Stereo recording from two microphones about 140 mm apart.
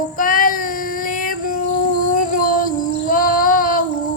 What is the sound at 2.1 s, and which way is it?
Child singing, 75° left (ahead or behind).